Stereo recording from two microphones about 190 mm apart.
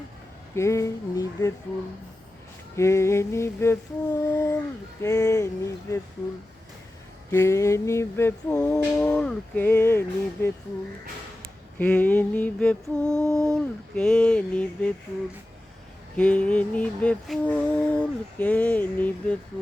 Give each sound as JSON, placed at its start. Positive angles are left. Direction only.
{"t": 0.5, "sound": "music", "side_deg": 15}
{"t": 2.7, "sound": "music", "side_deg": 15}
{"t": 7.3, "sound": "music", "side_deg": 15}
{"t": 11.8, "sound": "a sound", "side_deg": 10}
{"t": 16.1, "sound": "music", "side_deg": 5}